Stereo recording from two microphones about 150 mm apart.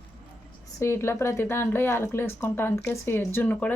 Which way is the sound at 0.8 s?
15° left (ahead or behind).